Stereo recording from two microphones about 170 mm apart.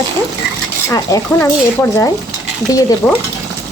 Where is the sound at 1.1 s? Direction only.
20° left (ahead or behind).